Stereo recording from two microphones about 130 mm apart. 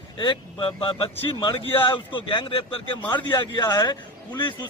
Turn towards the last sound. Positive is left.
turn(degrees=35)  # may be behind; listen again after turning